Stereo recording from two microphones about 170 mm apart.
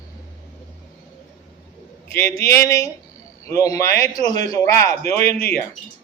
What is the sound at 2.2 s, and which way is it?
Speech, 15° left (ahead or behind).